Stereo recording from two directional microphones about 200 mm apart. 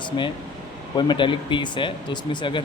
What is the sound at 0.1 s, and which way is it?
Speech, 20° left (ahead or behind).